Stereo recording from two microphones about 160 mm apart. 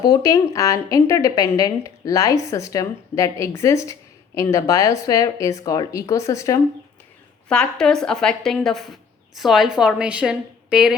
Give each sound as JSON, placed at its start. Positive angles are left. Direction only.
{"t": 0.0, "sound": "speech", "side_deg": 20}
{"t": 7.4, "sound": "speech", "side_deg": 5}